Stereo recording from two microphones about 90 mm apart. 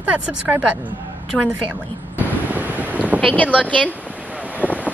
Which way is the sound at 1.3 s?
5° left (ahead or behind).